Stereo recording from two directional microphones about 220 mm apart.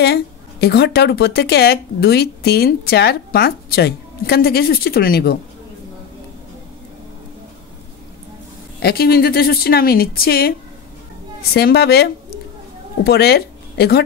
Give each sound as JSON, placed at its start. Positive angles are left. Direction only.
{"t": 0.0, "sound": "speech", "side_deg": 45}
{"t": 8.7, "sound": "speech", "side_deg": 45}
{"t": 11.5, "sound": "speech", "side_deg": 45}